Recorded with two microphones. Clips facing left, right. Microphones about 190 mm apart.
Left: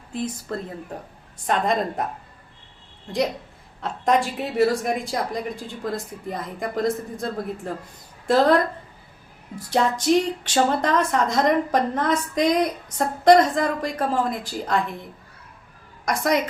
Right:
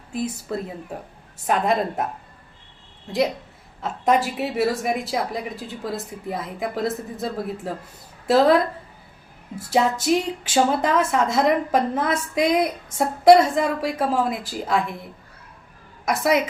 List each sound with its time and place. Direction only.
0.1 s a woman's voice: 10° right (ahead or behind)
3.1 s a woman's voice: 5° right (ahead or behind)
16.0 s a woman's voice: 5° right (ahead or behind)